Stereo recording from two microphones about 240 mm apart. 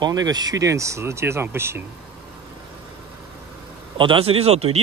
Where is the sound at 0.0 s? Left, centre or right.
Centre.